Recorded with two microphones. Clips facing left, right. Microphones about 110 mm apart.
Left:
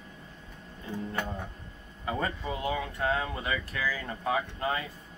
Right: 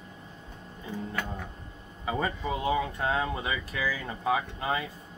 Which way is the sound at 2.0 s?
10° right (ahead or behind).